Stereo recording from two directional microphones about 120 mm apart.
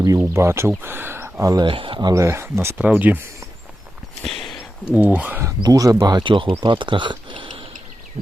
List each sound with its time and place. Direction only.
0.0 s speech: 25° right (ahead or behind)
1.6 s speech: 45° right (ahead or behind)
2.1 s speech: 25° right (ahead or behind)
4.2 s a sound: centre (ahead or behind)
4.9 s speech: 15° right (ahead or behind)
5.5 s speech: 30° right (ahead or behind)